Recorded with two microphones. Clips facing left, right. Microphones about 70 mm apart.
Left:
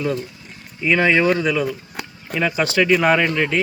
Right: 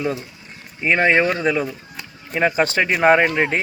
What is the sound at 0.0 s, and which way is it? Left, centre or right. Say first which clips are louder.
Speech: left 1 dB; centre.